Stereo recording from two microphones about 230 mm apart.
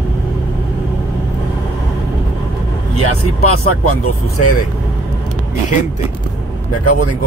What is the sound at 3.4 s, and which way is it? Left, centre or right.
Speech, left.